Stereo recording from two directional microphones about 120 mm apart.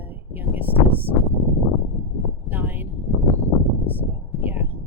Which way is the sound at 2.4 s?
15° right (ahead or behind).